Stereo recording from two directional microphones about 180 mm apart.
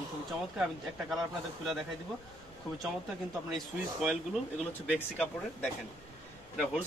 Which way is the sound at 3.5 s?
Centre (ahead or behind).